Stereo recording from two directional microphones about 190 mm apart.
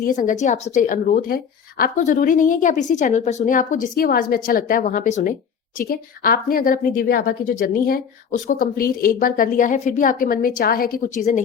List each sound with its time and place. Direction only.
0.0 s a woman's voice: 45° left (ahead or behind)